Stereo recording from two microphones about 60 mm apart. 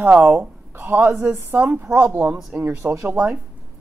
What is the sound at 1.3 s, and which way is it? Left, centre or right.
Speech, right.